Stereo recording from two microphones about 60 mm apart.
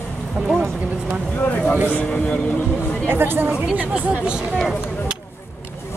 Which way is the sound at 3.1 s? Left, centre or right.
Right.